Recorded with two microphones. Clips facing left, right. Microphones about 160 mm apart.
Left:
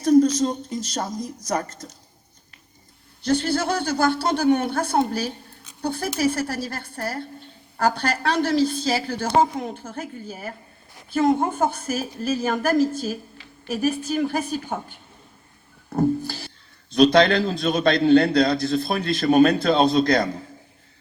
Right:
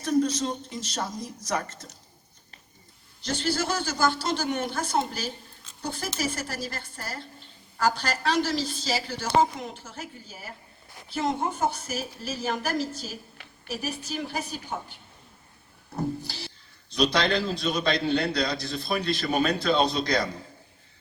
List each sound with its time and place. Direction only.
0.0 s speech: 40° left (ahead or behind)
3.2 s a woman's voice: 55° left (ahead or behind)
15.9 s a sound: 50° left (ahead or behind)
16.9 s a man's voice: 50° left (ahead or behind)